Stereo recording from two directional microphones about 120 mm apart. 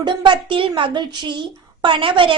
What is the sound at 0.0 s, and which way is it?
A woman's voice, 40° right (ahead or behind).